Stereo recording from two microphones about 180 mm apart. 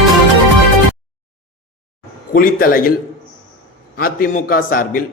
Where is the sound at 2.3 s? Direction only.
55° left (ahead or behind).